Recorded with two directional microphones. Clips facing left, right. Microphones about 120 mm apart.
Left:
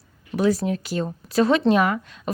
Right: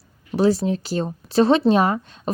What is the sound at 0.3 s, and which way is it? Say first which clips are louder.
A woman's voice: right 2 dB; 30° right (ahead or behind).